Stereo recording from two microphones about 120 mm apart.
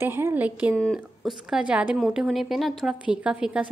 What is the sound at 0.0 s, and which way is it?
Speech, 20° right (ahead or behind).